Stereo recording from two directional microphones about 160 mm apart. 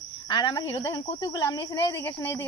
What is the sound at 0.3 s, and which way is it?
A woman's voice, 25° left (ahead or behind).